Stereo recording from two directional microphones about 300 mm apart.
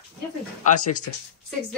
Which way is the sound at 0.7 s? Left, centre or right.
Left.